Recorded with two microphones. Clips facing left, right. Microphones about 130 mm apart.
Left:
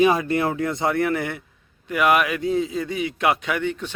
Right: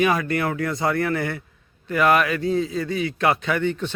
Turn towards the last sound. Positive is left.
turn(degrees=10)  # may be behind; listen again after turning